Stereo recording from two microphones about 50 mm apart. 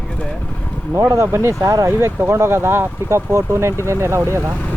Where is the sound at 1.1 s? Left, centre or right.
Right.